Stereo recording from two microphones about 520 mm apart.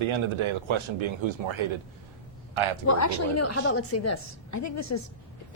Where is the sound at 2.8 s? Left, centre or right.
Left.